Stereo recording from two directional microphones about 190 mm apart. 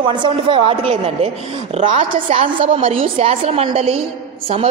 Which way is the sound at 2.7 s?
30° right (ahead or behind).